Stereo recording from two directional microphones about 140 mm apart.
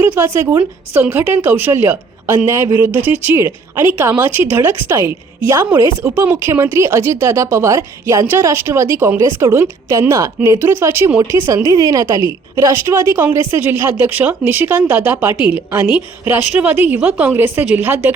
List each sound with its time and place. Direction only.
0.0 s a woman's voice: 15° right (ahead or behind)